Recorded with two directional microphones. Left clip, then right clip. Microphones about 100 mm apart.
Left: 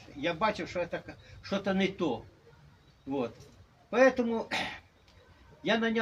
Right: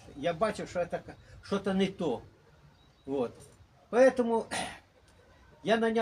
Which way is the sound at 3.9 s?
40° right (ahead or behind).